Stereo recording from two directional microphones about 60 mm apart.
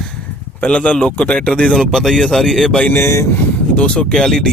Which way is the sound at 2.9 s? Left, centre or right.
Left.